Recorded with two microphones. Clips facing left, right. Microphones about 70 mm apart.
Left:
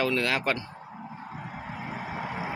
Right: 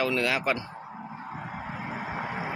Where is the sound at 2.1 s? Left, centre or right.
Centre.